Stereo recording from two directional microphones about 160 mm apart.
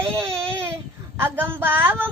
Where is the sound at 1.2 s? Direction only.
15° right (ahead or behind).